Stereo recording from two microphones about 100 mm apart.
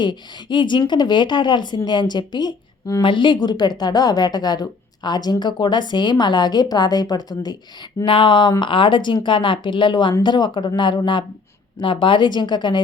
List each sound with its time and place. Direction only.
0.0 s a woman's voice: 50° left (ahead or behind)
8.0 s a woman's voice: 55° left (ahead or behind)